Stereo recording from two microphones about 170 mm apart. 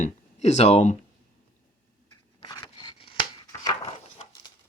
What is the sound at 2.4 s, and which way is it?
Scissors, 25° left (ahead or behind).